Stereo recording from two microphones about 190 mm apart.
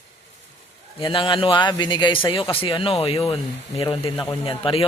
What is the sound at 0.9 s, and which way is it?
A man's voice, 25° left (ahead or behind).